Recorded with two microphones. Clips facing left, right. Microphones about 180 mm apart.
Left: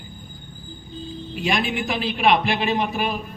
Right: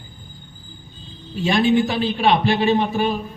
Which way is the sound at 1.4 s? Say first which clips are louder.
Right 7 dB; 30° right (ahead or behind).